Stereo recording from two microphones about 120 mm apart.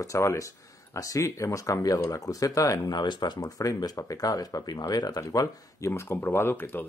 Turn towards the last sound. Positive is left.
turn(degrees=15)  # may be behind; listen again after turning